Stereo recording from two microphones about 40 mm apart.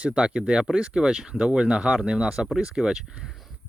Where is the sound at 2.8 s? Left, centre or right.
Centre.